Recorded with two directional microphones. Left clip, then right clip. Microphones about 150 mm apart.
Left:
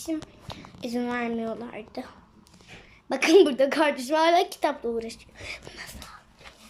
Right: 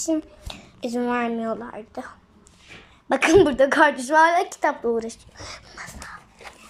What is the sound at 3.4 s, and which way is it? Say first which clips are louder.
A woman's voice: right 5 dB; 10° left (ahead or behind).